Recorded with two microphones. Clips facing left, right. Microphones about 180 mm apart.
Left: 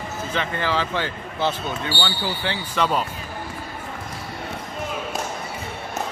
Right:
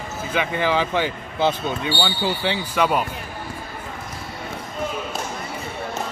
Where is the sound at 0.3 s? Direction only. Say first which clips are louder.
Right 4 dB; 15° right (ahead or behind).